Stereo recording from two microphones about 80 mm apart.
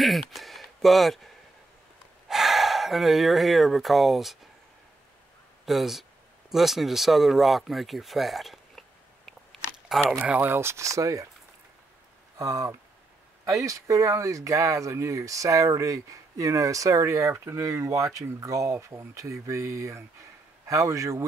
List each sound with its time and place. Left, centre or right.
0.0 s a sound: centre
2.2 s speech: centre
5.7 s speech: centre
10.2 s speech: centre
10.5 s speech: right
12.4 s speech: right